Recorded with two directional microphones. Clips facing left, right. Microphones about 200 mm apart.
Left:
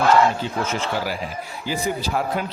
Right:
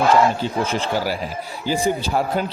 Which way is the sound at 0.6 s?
30° right (ahead or behind).